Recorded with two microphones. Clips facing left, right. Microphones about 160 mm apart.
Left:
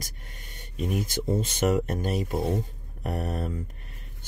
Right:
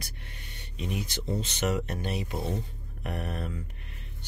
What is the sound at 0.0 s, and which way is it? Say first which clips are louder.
Speech: left 1 dB; 45° left (ahead or behind).